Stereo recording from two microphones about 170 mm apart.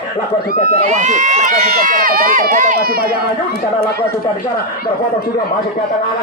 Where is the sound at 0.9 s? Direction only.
45° right (ahead or behind); by 3.1 s 65° right (ahead or behind).